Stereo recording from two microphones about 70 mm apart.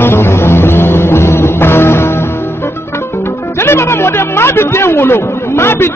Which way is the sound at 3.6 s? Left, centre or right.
Left.